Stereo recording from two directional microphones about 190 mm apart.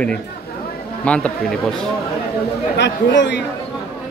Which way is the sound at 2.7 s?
65° left (ahead or behind).